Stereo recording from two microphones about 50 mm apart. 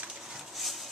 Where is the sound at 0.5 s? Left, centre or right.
Centre.